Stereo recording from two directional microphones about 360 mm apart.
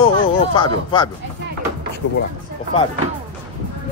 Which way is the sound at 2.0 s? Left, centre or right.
Left.